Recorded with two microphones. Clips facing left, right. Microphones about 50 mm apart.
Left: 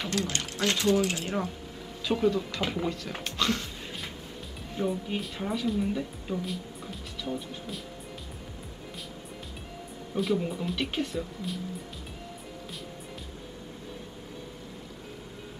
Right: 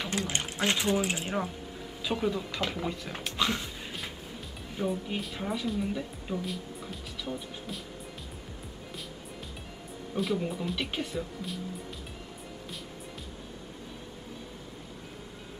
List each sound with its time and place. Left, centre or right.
0.3 s speech: centre
3.3 s music: centre
4.7 s speech: centre
10.1 s speech: centre